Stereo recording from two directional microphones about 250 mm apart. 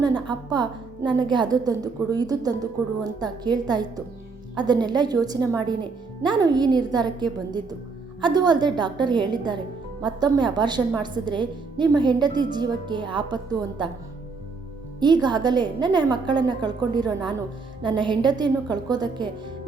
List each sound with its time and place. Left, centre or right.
0.0 s a woman's voice: centre
15.0 s a woman's voice: centre